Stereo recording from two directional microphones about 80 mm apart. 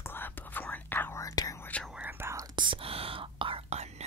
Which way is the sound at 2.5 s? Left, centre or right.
Right.